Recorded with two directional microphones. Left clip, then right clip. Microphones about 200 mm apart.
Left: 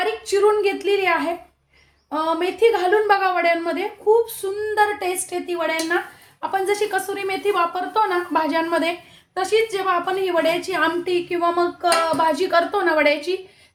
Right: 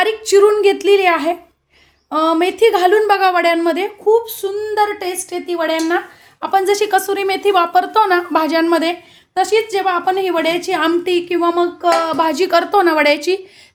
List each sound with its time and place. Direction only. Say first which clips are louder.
0.0 s a woman's voice: right 7 dB; 55° right (ahead or behind)